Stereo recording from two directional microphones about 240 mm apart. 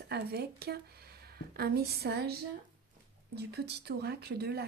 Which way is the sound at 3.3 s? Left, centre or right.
Right.